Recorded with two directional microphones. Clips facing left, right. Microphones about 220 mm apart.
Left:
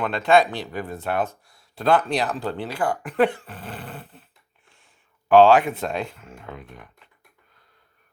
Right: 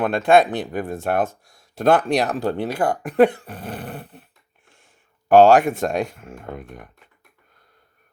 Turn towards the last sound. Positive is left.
turn(degrees=-50)  # may be behind; listen again after turning